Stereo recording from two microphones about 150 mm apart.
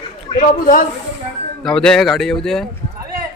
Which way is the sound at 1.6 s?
5° left (ahead or behind).